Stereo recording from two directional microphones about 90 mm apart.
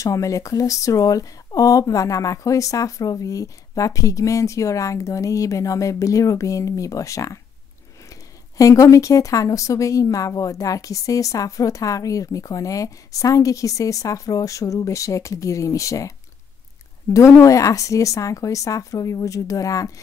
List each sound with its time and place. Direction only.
0.0 s speech: 40° left (ahead or behind)
17.1 s speech: 35° left (ahead or behind)